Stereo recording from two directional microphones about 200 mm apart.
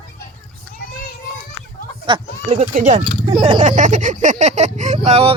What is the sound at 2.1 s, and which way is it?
Speech, 30° right (ahead or behind).